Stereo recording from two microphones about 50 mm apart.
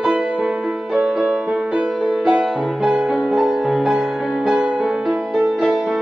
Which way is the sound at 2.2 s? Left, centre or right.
Centre.